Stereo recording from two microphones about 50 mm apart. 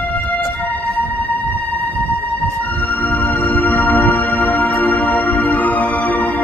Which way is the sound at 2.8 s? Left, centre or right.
Left.